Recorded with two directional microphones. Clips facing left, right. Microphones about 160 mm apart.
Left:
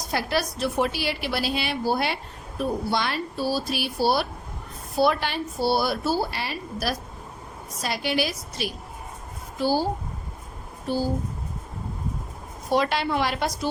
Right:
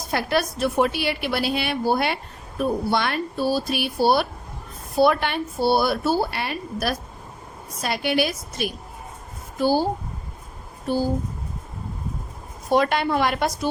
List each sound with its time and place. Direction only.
0.0 s a woman's voice: 55° right (ahead or behind)
10.9 s a woman's voice: 50° right (ahead or behind)
12.7 s a woman's voice: 50° right (ahead or behind)